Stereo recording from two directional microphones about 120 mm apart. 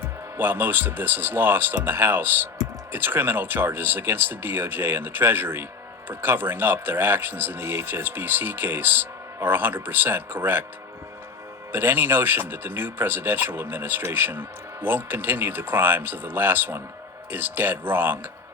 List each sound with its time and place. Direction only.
0.3 s speech: 15° right (ahead or behind)
11.7 s speech: 20° right (ahead or behind)